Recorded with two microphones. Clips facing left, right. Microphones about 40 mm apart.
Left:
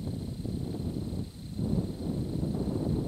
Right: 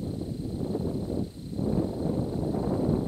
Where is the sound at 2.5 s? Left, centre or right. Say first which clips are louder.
Right 6 dB; right.